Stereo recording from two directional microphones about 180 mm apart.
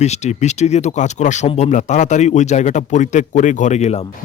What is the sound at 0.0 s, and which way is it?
Speech, 40° left (ahead or behind).